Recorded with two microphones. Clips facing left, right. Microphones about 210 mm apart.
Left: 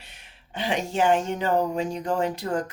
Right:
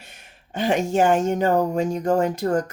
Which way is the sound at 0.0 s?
45° right (ahead or behind).